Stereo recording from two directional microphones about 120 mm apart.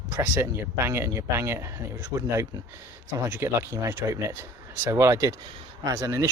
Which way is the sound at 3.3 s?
20° right (ahead or behind).